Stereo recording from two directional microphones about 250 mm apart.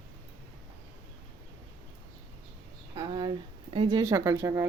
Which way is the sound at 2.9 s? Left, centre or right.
Centre.